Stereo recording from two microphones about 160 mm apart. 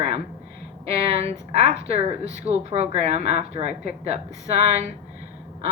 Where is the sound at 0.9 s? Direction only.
40° right (ahead or behind).